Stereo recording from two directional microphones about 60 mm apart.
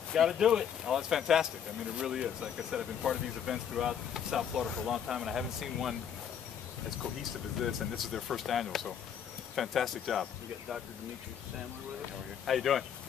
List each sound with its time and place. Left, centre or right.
0.1 s speech: centre
7.5 s speech: centre
12.4 s speech: centre